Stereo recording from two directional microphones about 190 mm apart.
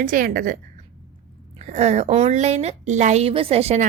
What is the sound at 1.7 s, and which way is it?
A woman's voice, 35° right (ahead or behind).